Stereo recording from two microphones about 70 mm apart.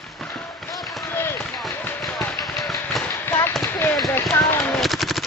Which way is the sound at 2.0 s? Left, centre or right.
Centre.